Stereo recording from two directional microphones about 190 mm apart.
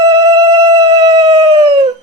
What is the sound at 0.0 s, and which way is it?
Howl, 20° right (ahead or behind).